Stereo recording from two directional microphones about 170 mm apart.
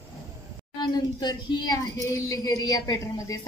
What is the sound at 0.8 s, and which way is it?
Speech, 25° left (ahead or behind).